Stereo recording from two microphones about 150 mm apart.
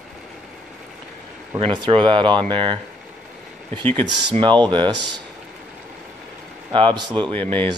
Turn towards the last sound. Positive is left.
turn(degrees=10)  # may be behind; listen again after turning